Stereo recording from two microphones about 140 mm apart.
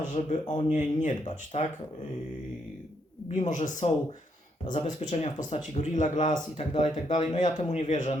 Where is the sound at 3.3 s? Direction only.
55° left (ahead or behind).